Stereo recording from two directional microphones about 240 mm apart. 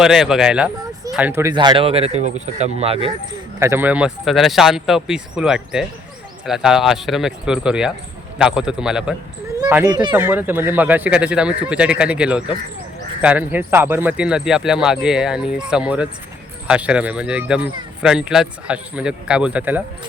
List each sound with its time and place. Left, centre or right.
0.0 s speech: centre; by 3.1 s right
3.6 s speech: centre